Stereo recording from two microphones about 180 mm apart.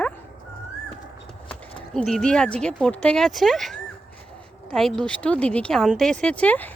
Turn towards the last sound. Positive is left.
turn(degrees=10)  # may be behind; listen again after turning